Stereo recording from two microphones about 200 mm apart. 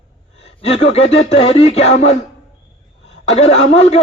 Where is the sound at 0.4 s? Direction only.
30° left (ahead or behind).